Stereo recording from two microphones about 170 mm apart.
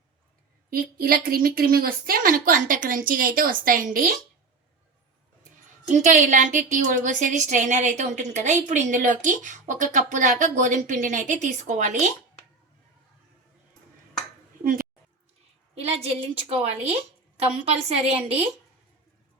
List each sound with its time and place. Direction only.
0.7 s a woman's voice: 60° right (ahead or behind)
5.9 s a woman's voice: 45° right (ahead or behind)
14.6 s a sound: 55° right (ahead or behind)
15.7 s a woman's voice: 35° right (ahead or behind)